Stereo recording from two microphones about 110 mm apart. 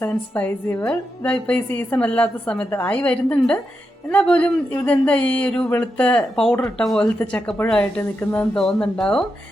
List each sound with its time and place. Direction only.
0.0 s a woman's voice: 15° left (ahead or behind)
8.5 s speech: 5° left (ahead or behind)